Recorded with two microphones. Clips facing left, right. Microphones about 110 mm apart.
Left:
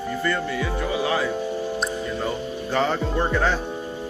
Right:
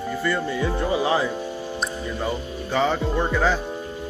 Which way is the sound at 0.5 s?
25° right (ahead or behind).